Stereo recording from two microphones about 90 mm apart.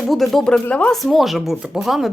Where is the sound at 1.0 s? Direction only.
Centre (ahead or behind).